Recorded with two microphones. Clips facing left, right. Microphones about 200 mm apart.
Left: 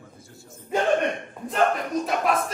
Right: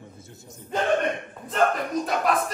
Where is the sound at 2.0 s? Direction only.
Centre (ahead or behind).